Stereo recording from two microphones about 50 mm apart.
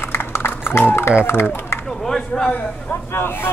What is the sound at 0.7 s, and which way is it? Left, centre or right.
Speech, left.